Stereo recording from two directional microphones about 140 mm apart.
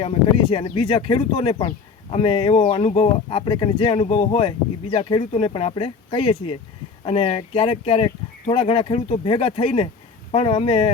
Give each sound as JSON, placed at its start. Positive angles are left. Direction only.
{"t": 0.0, "sound": "speech", "side_deg": 40}